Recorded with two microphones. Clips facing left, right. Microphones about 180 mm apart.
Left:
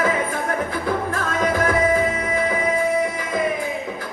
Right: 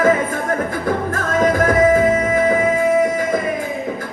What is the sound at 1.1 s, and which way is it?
Music, 45° right (ahead or behind).